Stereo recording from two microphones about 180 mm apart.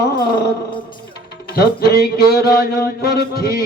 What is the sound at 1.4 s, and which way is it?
Music, 60° left (ahead or behind).